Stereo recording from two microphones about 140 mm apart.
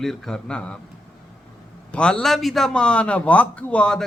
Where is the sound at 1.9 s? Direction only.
5° left (ahead or behind).